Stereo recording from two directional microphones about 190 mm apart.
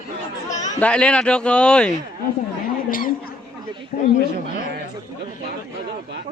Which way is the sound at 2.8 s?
45° left (ahead or behind).